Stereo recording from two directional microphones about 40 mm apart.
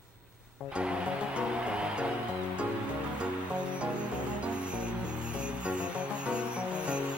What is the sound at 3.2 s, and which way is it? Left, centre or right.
Music, right.